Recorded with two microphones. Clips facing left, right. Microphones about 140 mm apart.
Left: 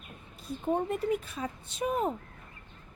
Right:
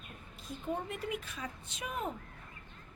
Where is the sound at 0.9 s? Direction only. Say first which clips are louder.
Left 9 dB; 40° left (ahead or behind).